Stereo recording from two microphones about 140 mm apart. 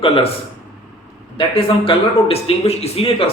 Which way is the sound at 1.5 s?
40° left (ahead or behind).